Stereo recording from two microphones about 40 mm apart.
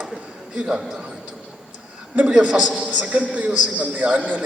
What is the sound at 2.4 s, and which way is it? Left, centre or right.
A man's voice, right.